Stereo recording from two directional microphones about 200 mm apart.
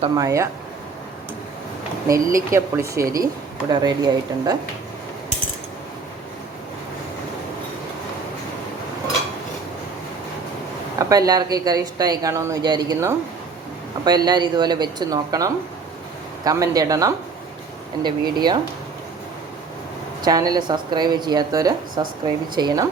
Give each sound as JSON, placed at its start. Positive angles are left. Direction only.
{"t": 0.0, "sound": "speech", "side_deg": -15}
{"t": 2.5, "sound": "speech", "side_deg": -15}
{"t": 10.9, "sound": "speech", "side_deg": -20}
{"t": 20.2, "sound": "speech", "side_deg": -20}